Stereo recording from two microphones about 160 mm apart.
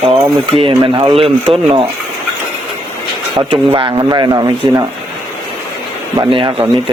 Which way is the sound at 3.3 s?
25° right (ahead or behind).